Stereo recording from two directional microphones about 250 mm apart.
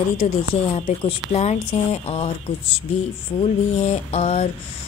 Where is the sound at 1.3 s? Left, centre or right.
Left.